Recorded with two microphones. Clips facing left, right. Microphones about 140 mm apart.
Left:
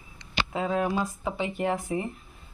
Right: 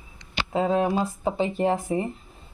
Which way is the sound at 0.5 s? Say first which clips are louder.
Right 5 dB; 25° right (ahead or behind).